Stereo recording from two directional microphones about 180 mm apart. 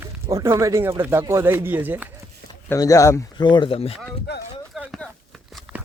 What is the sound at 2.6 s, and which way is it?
Speech, 20° left (ahead or behind).